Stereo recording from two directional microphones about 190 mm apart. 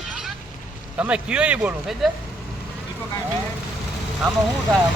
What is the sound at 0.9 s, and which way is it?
Speech, 5° right (ahead or behind).